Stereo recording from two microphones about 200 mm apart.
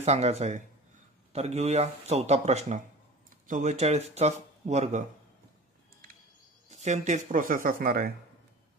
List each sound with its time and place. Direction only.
0.0 s speech: 35° right (ahead or behind)
6.7 s speech: 35° right (ahead or behind)